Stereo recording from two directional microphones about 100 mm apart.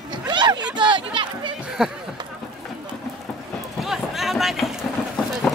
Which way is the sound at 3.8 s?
Centre (ahead or behind).